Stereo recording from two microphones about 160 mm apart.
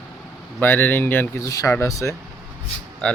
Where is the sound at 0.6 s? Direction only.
10° left (ahead or behind).